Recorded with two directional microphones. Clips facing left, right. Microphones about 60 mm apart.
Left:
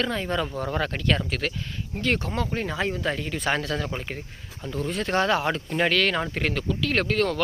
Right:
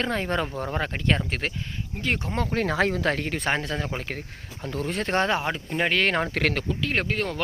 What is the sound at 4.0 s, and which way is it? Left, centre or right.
Speech, right.